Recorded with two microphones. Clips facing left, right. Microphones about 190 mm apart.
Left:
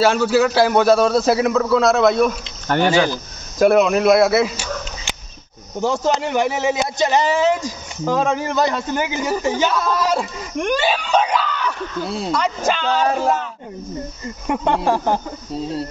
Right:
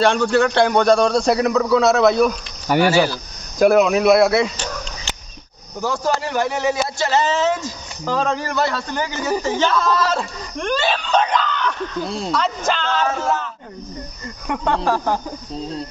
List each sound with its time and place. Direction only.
0.0 s a man's voice: 5° left (ahead or behind)
5.8 s speech: 20° left (ahead or behind)
14.5 s speech: 20° left (ahead or behind)
15.5 s a man's voice: 5° left (ahead or behind)